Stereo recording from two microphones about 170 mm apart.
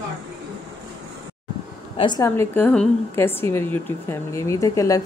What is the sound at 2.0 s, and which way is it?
A woman's voice, 25° left (ahead or behind).